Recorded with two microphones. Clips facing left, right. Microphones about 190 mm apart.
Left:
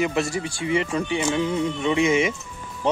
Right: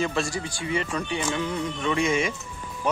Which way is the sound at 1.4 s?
10° left (ahead or behind).